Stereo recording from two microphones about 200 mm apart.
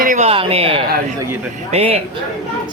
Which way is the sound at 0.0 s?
40° right (ahead or behind).